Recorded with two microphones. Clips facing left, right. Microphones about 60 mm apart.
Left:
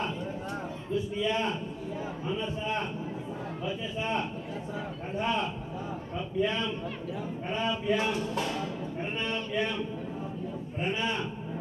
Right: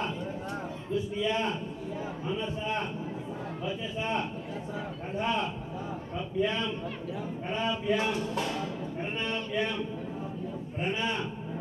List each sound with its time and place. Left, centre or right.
0.0 s a sound: centre
1.2 s a man's voice: centre
3.6 s a sound: centre
4.7 s a man's voice: centre
7.4 s music: centre
10.8 s a man's voice: centre